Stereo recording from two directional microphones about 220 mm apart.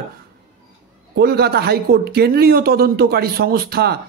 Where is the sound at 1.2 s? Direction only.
45° right (ahead or behind).